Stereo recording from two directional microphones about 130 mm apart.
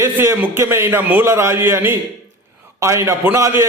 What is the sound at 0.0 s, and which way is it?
A man's voice, 20° right (ahead or behind).